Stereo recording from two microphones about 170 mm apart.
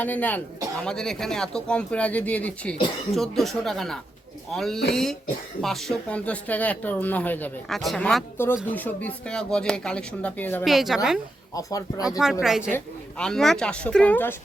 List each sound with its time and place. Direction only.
0.0 s speech: 10° left (ahead or behind)
10.6 s speech: centre (ahead or behind)
11.5 s speech: 20° left (ahead or behind)
12.2 s speech: centre (ahead or behind)